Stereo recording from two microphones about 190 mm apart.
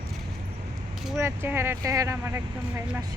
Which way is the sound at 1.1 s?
10° right (ahead or behind).